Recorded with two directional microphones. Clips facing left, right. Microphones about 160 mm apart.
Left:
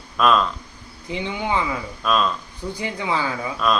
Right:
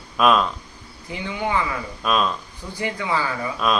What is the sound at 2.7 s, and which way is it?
Speech, 20° left (ahead or behind).